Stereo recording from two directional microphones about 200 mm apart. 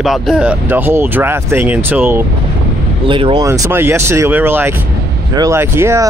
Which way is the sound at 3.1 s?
25° right (ahead or behind).